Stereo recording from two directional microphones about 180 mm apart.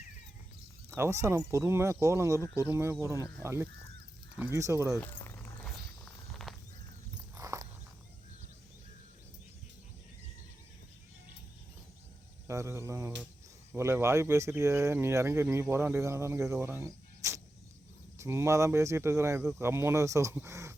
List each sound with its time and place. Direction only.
0.9 s speech: 15° right (ahead or behind)
4.9 s a sound: 10° left (ahead or behind)
7.3 s walk: 20° right (ahead or behind)
12.5 s speech: 15° right (ahead or behind)